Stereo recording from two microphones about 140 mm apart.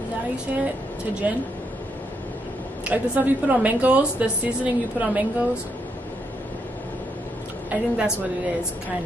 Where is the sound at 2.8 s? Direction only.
10° right (ahead or behind).